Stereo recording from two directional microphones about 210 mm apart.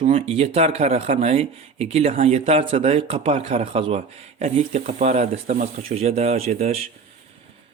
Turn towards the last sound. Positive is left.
turn(degrees=-30)  # may be behind; listen again after turning